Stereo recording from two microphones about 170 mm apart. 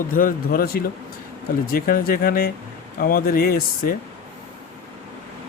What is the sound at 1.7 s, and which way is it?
Speech, 60° left (ahead or behind).